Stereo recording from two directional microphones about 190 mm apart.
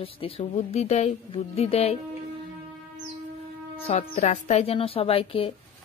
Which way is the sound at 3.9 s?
35° left (ahead or behind).